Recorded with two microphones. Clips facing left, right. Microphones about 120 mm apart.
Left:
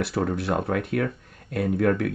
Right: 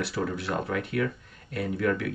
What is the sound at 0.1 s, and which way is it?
Speech, 45° left (ahead or behind).